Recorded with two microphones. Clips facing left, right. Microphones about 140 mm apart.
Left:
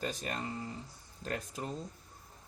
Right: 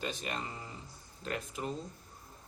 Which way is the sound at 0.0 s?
40° left (ahead or behind).